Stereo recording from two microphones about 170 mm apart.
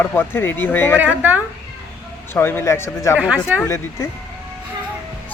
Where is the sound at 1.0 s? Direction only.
10° right (ahead or behind).